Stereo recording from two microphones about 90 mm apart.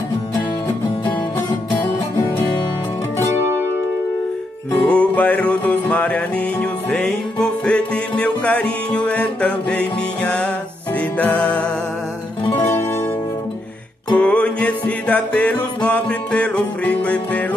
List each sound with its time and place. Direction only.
2.1 s music: 20° left (ahead or behind)
4.7 s music: 15° left (ahead or behind)
12.5 s music: 25° left (ahead or behind)
14.1 s music: 15° left (ahead or behind)